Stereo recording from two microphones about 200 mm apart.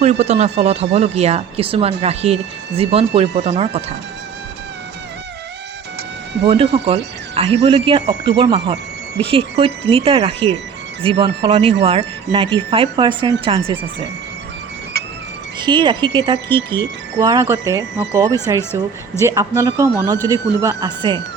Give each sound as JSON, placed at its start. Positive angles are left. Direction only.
{"t": 0.0, "sound": "speech", "side_deg": -35}
{"t": 6.4, "sound": "speech", "side_deg": -30}
{"t": 15.6, "sound": "speech", "side_deg": -25}